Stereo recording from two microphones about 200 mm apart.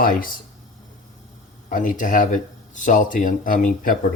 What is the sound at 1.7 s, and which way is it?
Speech, 40° left (ahead or behind).